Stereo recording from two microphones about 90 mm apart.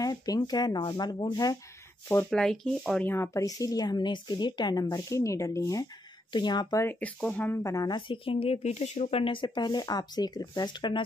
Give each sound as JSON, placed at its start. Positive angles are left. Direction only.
{"t": 0.0, "sound": "speech", "side_deg": 45}
{"t": 2.2, "sound": "speech", "side_deg": 5}
{"t": 3.0, "sound": "speech", "side_deg": 30}
{"t": 6.3, "sound": "speech", "side_deg": 55}
{"t": 7.0, "sound": "speech", "side_deg": 15}
{"t": 7.6, "sound": "speech", "side_deg": 40}
{"t": 8.1, "sound": "speech", "side_deg": 90}